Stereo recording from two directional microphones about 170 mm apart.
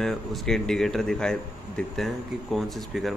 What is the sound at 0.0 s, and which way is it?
A man's voice, centre (ahead or behind).